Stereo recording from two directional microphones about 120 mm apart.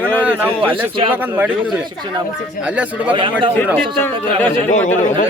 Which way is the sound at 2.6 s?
10° right (ahead or behind).